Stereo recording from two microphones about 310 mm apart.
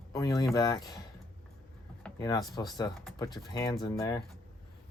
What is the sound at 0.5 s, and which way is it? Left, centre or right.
Speech, centre.